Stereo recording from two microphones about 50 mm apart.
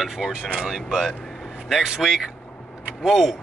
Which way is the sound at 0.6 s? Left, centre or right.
Centre.